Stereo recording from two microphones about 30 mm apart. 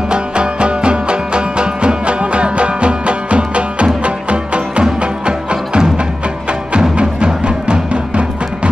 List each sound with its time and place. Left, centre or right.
0.1 s music: right
7.4 s music: right